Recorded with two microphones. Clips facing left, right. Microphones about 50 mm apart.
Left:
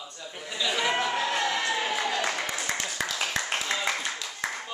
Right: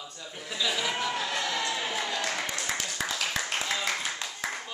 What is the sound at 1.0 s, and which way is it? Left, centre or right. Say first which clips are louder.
Music: left 3 dB; centre.